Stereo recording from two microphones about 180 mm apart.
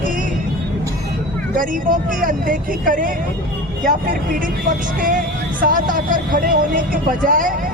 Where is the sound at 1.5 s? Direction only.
50° right (ahead or behind).